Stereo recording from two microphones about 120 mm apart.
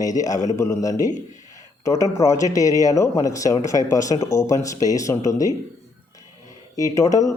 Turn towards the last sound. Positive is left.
turn(degrees=25)  # may be behind; listen again after turning